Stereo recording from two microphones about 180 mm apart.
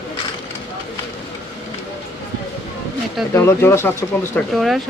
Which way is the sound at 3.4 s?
15° left (ahead or behind).